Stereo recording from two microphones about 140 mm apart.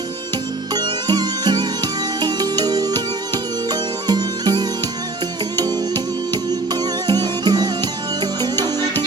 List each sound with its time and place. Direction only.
0.7 s music: 30° right (ahead or behind)